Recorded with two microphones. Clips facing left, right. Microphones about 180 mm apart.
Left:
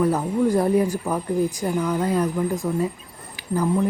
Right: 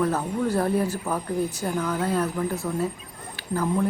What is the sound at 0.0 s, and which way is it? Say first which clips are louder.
A woman's voice: left 4 dB; 10° left (ahead or behind).